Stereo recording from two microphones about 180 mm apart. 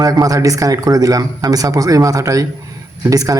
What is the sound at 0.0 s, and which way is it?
Speech, 20° right (ahead or behind).